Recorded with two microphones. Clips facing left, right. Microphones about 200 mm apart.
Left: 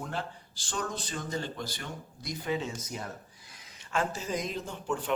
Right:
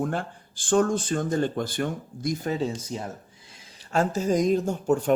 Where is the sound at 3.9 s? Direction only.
40° right (ahead or behind).